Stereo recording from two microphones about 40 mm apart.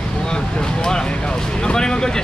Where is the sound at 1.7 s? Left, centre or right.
Centre.